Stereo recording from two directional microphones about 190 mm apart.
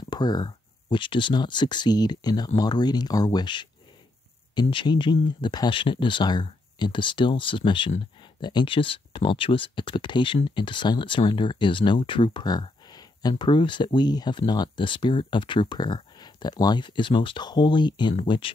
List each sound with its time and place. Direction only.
0.1 s speech: 20° left (ahead or behind)